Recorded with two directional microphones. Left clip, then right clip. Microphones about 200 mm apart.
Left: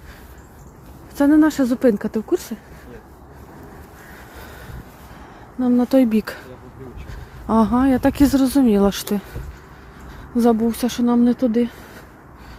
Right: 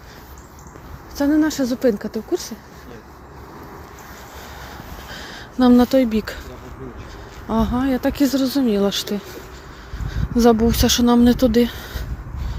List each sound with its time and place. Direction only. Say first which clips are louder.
1.1 s speech: left 3 dB; 45° left (ahead or behind)
5.5 s speech: right 5 dB; centre (ahead or behind)
5.9 s speech: left 1 dB; 35° left (ahead or behind)
7.4 s speech: left 4 dB; 40° left (ahead or behind)
10.3 s speech: right 3 dB; 10° left (ahead or behind)